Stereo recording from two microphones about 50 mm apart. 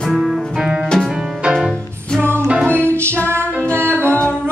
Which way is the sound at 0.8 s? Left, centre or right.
Centre.